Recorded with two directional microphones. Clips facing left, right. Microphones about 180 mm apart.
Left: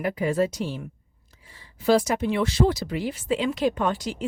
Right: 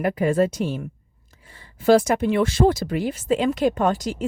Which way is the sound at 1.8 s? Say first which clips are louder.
Right 4 dB; 50° right (ahead or behind).